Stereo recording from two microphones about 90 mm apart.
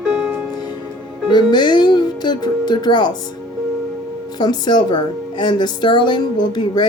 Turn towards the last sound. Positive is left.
turn(degrees=55)  # may be behind; listen again after turning